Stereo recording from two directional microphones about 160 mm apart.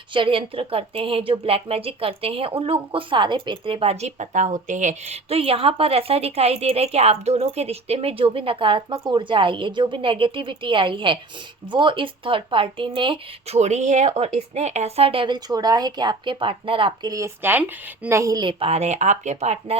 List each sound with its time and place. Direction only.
0.1 s a woman's voice: 30° right (ahead or behind)
13.6 s a woman's voice: 45° right (ahead or behind)